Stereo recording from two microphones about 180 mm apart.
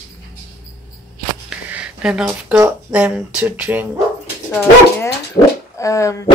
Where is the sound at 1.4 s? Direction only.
5° right (ahead or behind).